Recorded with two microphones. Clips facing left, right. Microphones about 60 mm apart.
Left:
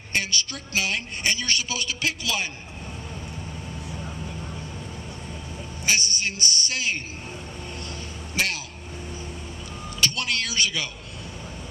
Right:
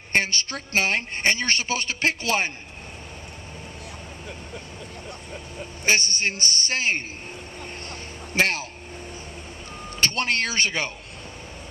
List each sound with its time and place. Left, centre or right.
0.1 s a woman's voice: right
5.9 s a woman's voice: right
8.4 s a man's voice: right
9.9 s speech: right